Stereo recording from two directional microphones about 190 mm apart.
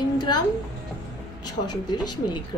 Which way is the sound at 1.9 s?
20° left (ahead or behind).